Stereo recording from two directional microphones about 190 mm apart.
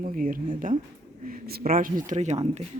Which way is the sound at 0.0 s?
45° right (ahead or behind).